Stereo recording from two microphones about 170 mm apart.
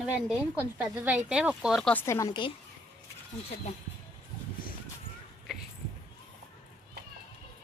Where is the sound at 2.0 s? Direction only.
15° left (ahead or behind).